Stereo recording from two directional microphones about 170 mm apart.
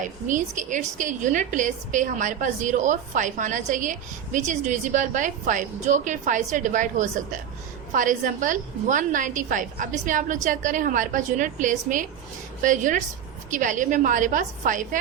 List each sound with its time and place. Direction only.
0.0 s a woman's voice: 50° right (ahead or behind)